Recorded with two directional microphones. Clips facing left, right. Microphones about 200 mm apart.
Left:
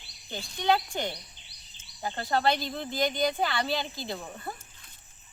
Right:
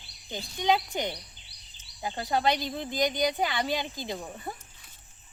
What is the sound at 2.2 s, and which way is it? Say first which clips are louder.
Speech: even; 10° right (ahead or behind).